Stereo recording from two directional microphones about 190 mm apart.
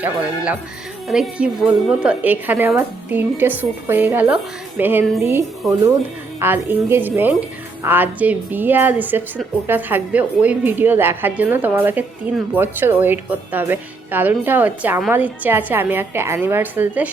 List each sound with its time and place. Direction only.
0.0 s a woman's voice: 5° right (ahead or behind)